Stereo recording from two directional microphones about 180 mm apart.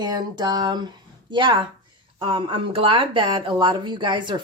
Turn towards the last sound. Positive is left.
turn(degrees=-25)  # may be behind; listen again after turning